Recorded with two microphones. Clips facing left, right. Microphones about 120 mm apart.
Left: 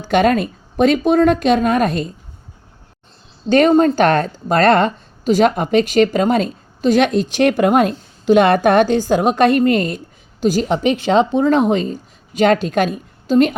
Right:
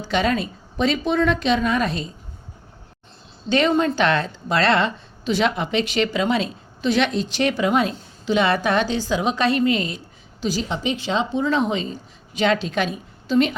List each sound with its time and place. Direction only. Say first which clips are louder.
0.0 s a woman's voice: left 7 dB; 50° left (ahead or behind)
3.5 s a woman's voice: left 7 dB; 45° left (ahead or behind)